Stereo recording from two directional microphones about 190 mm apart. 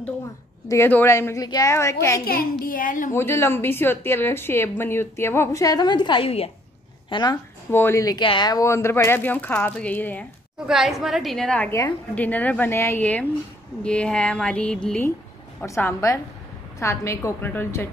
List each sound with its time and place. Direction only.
0.7 s a woman's voice: 10° left (ahead or behind)
2.6 s a woman's voice: 45° left (ahead or behind)
3.2 s a woman's voice: 15° left (ahead or behind)
10.7 s a woman's voice: centre (ahead or behind)
15.6 s a woman's voice: 15° left (ahead or behind)